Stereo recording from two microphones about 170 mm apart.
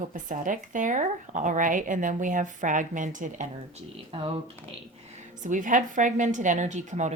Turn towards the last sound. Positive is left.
turn(degrees=-45)  # may be behind; listen again after turning